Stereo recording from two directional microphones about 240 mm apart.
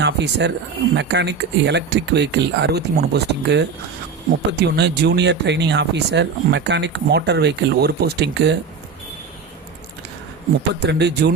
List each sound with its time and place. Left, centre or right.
0.0 s speech: right
10.8 s speech: right